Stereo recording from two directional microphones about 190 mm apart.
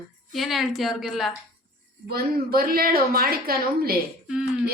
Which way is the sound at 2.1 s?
50° right (ahead or behind).